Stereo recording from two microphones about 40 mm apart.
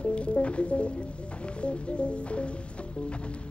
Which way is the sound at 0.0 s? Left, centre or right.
Left.